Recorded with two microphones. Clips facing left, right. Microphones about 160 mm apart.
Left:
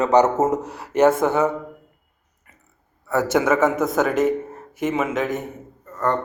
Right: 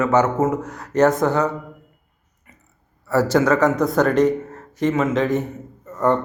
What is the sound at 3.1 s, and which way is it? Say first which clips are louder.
Speech: right 2 dB; 20° left (ahead or behind).